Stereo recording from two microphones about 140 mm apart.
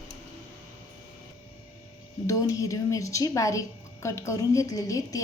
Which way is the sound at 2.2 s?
25° left (ahead or behind).